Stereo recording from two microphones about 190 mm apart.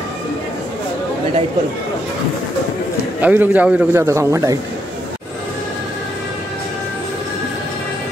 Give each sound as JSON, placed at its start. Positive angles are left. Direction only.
{"t": 3.2, "sound": "a man's voice", "side_deg": -10}